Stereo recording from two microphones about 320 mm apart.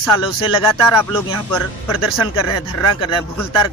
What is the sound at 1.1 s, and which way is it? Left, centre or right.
Speech, centre.